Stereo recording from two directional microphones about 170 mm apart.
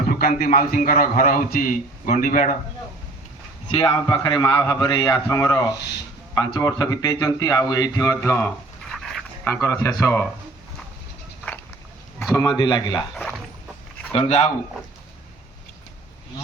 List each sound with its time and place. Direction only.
0.1 s a man's voice: 60° left (ahead or behind)
3.7 s a man's voice: 35° left (ahead or behind); by 8.5 s 15° left (ahead or behind)
8.9 s dog: centre (ahead or behind)
9.4 s speech: 15° left (ahead or behind)
12.3 s a man's voice: 20° left (ahead or behind)
13.1 s speech: 5° left (ahead or behind)
14.1 s speech: 40° left (ahead or behind)